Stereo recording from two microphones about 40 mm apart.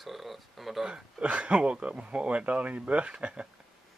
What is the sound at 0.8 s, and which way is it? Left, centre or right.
Speech, right.